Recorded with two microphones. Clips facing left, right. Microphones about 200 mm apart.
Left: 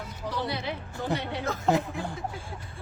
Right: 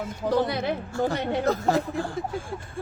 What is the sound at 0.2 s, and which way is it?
Speech, 50° right (ahead or behind).